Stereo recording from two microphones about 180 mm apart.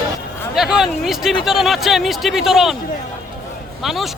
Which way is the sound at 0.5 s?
Centre (ahead or behind).